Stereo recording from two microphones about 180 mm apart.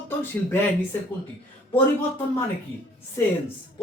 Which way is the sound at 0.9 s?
10° left (ahead or behind).